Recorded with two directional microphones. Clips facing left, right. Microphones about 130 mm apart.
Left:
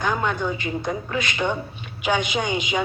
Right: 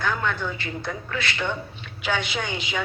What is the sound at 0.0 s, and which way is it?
A woman's voice, 15° left (ahead or behind).